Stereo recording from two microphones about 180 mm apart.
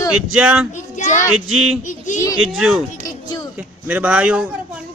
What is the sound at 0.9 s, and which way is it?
A child's voice, 45° left (ahead or behind).